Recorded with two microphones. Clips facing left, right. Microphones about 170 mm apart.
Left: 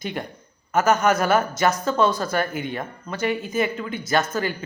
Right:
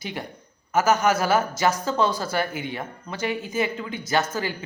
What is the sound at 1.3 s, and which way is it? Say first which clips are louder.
A man's voice: left 1 dB; 10° right (ahead or behind).